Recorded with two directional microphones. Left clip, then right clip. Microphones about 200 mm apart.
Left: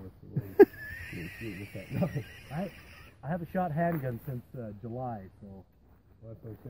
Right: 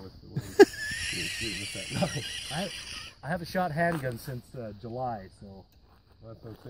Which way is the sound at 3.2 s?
15° right (ahead or behind).